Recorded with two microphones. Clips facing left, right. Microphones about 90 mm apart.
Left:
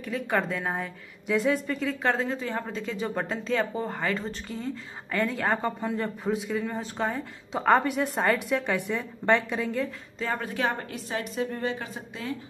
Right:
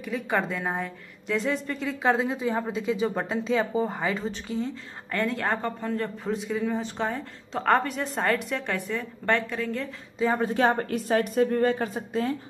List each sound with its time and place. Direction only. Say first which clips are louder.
0.0 s speech: even; centre (ahead or behind)
2.1 s speech: right 3 dB; 10° right (ahead or behind)
5.8 s a woman's voice: even; 15° left (ahead or behind)
8.8 s a woman's voice: left 2 dB; 15° left (ahead or behind)
10.1 s speech: right 6 dB; 15° right (ahead or behind)
10.4 s a woman's voice: right 6 dB; 35° right (ahead or behind)